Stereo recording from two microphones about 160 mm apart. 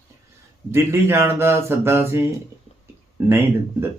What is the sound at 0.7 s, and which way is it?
A man's voice, 15° right (ahead or behind).